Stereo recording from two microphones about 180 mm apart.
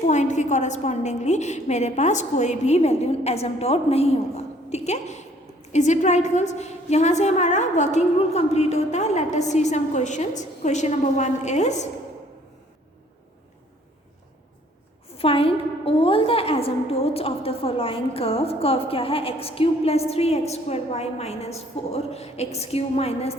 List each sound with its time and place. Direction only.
0.0 s a woman's voice: 40° left (ahead or behind)
15.1 s a woman's voice: 30° left (ahead or behind)